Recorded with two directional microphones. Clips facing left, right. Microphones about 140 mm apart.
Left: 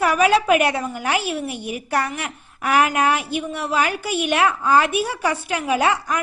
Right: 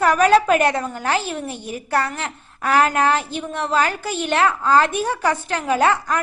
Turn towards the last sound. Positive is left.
turn(degrees=15)  # may be behind; listen again after turning